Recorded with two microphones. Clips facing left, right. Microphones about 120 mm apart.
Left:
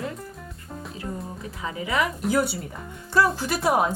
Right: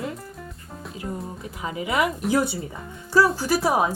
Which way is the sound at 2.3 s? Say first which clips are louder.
Even; 20° right (ahead or behind).